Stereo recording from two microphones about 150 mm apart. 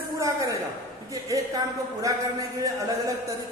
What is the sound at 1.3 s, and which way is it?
Speech, 20° right (ahead or behind).